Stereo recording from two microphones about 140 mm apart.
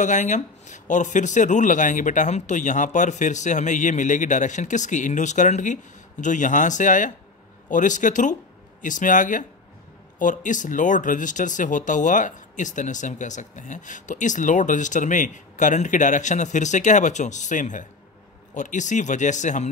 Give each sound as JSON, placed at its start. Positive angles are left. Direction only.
{"t": 0.0, "sound": "speech", "side_deg": 60}